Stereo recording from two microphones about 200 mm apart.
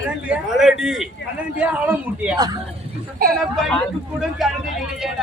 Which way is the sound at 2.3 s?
20° right (ahead or behind).